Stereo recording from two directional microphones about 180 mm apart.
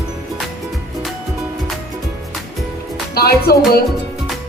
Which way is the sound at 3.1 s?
60° left (ahead or behind).